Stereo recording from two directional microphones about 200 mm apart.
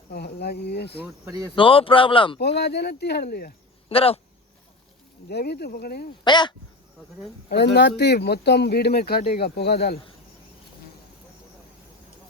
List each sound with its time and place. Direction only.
0.1 s speech: 55° left (ahead or behind)
1.0 s speech: 15° right (ahead or behind)
1.5 s speech: 25° left (ahead or behind)
2.6 s speech: 55° left (ahead or behind)
3.8 s speech: 30° left (ahead or behind)
5.3 s speech: 55° left (ahead or behind)
6.2 s speech: 20° left (ahead or behind)
7.5 s speech: 60° left (ahead or behind)